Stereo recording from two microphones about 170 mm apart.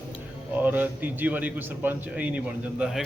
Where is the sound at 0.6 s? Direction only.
10° right (ahead or behind).